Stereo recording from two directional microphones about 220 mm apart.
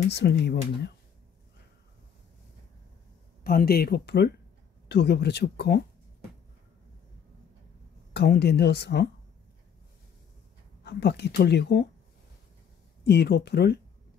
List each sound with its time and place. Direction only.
0.1 s speech: 50° left (ahead or behind)
3.4 s speech: 45° left (ahead or behind)
8.1 s speech: 50° left (ahead or behind)
10.8 s speech: 50° left (ahead or behind)
13.0 s speech: 50° left (ahead or behind)